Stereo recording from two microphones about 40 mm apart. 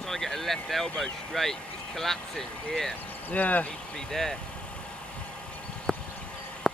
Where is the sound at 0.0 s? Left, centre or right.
Centre.